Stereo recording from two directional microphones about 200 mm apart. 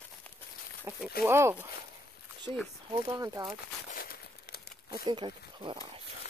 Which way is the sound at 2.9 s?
20° right (ahead or behind).